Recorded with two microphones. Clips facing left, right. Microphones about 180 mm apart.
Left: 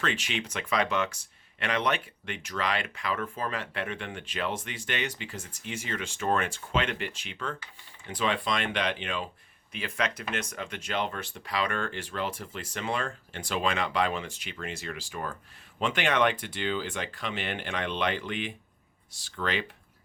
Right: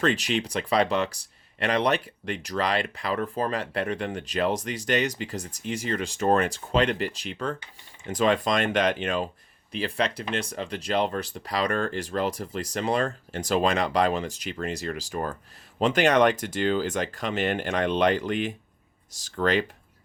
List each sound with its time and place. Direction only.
0.0 s speech: 40° right (ahead or behind)
9.7 s speech: 35° right (ahead or behind)